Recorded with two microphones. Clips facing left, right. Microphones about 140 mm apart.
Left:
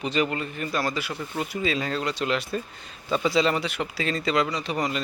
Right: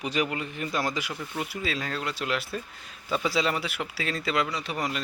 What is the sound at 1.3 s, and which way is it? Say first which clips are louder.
Speech: left 5 dB; 5° right (ahead or behind).